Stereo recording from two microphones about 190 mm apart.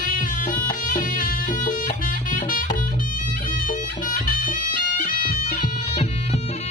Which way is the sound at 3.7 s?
45° left (ahead or behind).